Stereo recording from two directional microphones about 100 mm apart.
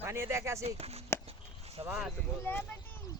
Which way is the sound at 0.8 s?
90° right.